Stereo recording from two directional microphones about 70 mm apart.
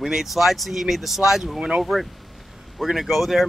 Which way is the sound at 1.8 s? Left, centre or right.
Centre.